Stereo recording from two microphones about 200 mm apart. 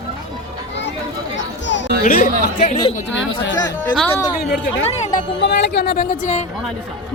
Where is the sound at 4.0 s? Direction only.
10° left (ahead or behind).